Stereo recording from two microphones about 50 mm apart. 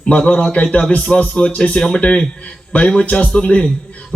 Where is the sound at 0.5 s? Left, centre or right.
Left.